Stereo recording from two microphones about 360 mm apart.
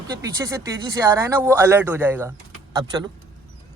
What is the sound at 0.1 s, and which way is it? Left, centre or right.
Speech, centre.